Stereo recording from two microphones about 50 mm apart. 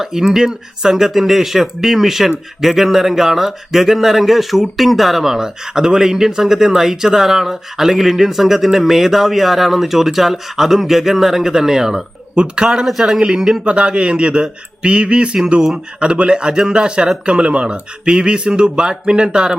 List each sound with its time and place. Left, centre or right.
0.0 s speech: centre
13.1 s speech: centre
13.7 s speech: right